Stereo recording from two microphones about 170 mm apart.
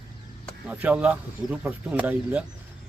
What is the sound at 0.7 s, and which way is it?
Speech, 10° right (ahead or behind).